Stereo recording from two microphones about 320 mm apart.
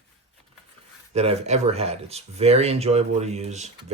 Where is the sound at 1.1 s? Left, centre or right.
Centre.